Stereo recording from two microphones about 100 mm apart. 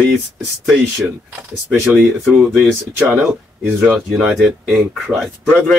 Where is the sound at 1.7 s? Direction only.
15° right (ahead or behind).